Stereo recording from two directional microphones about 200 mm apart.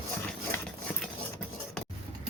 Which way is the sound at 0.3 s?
10° left (ahead or behind).